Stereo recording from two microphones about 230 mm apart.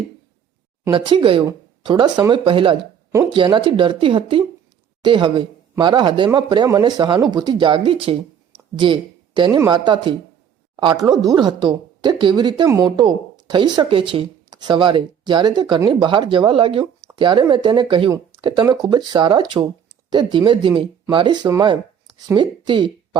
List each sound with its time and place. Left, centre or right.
0.9 s speech: right